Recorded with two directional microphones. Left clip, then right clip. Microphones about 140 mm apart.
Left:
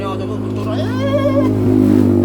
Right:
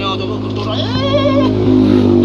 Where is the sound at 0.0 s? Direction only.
35° left (ahead or behind).